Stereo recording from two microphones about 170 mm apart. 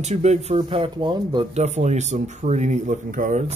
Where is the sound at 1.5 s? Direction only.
40° right (ahead or behind).